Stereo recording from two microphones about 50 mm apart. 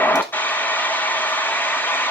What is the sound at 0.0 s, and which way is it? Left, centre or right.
Vehicle, left.